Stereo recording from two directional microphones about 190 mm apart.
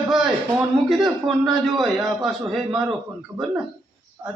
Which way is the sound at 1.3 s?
Centre (ahead or behind).